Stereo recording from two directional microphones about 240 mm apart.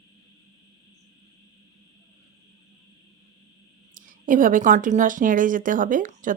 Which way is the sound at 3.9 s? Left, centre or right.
Right.